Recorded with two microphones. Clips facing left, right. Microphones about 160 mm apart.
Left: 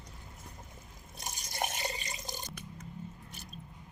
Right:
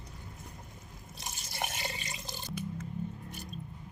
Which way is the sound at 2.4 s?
45° left (ahead or behind).